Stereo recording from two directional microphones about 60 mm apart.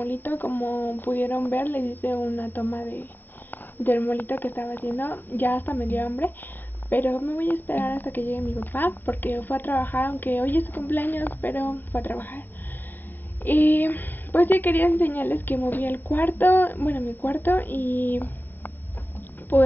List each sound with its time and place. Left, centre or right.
0.0 s a woman's voice: left